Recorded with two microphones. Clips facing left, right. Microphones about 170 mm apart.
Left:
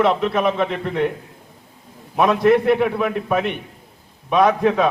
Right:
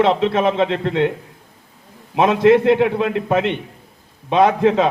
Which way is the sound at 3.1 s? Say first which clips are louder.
Right 3 dB; 90° right.